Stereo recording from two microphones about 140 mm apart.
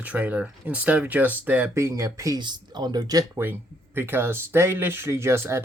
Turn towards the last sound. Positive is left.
turn(degrees=-20)  # may be behind; listen again after turning